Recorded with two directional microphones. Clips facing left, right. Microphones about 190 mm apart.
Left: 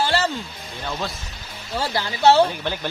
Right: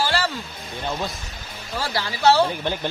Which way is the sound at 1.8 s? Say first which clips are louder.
Left 2 dB; 20° left (ahead or behind).